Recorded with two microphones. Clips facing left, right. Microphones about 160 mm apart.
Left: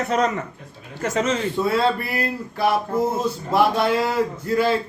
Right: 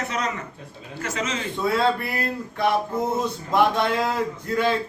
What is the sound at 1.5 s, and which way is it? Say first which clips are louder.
A man's voice: right 2 dB; centre (ahead or behind).